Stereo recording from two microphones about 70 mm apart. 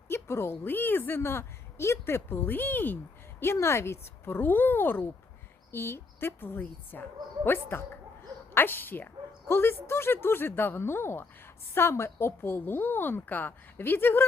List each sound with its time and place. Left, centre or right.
0.1 s a woman's voice: left
3.4 s a woman's voice: left